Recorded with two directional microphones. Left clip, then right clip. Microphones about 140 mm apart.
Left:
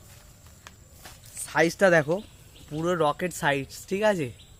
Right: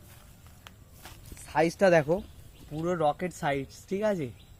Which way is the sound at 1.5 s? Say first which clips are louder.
Left 2 dB; 20° left (ahead or behind).